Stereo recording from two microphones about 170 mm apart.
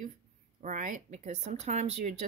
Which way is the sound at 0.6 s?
50° right (ahead or behind).